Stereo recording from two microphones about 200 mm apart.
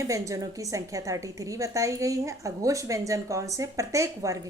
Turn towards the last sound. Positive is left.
turn(degrees=-15)  # may be behind; listen again after turning